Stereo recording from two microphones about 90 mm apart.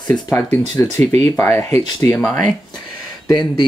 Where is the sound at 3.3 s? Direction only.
50° left (ahead or behind).